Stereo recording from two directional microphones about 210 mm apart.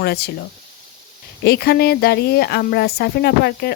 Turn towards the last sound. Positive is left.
turn(degrees=50)  # may be behind; listen again after turning